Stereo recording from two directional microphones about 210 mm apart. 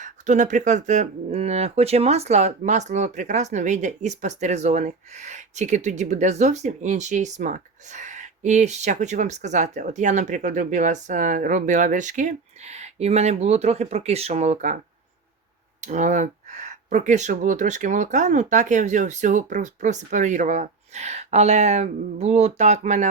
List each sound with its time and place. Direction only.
0.0 s speech: 35° right (ahead or behind)
15.8 s speech: 35° right (ahead or behind)